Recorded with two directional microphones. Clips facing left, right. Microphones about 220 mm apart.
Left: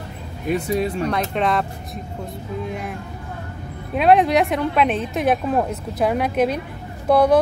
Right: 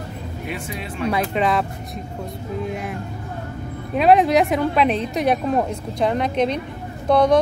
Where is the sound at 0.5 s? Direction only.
40° left (ahead or behind).